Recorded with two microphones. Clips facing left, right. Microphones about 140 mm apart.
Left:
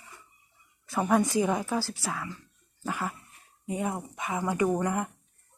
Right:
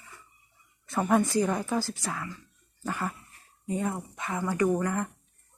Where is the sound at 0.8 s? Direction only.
Centre (ahead or behind).